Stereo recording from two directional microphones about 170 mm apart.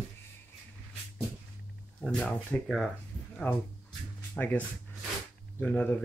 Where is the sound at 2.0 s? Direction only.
5° left (ahead or behind).